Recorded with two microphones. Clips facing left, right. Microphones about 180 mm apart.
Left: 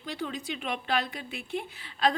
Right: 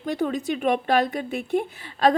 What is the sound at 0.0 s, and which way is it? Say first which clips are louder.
A woman's voice: right 10 dB; 50° right (ahead or behind).